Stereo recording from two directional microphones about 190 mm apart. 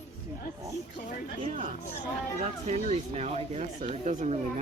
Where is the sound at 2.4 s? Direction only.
35° right (ahead or behind).